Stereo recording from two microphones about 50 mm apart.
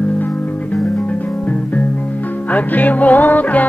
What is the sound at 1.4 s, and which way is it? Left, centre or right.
Music, left.